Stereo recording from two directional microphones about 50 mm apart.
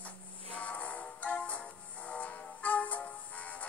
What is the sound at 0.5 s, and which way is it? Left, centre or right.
Music, left.